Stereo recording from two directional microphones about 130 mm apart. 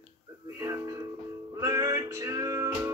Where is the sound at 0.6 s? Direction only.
25° right (ahead or behind).